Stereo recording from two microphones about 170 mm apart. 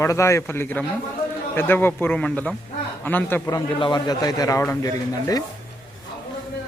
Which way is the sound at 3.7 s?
25° left (ahead or behind).